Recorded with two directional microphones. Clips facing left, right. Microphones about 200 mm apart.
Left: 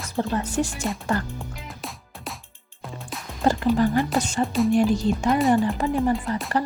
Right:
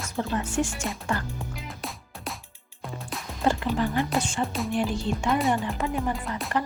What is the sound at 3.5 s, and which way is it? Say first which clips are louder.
Speech: left 5 dB; 40° left (ahead or behind).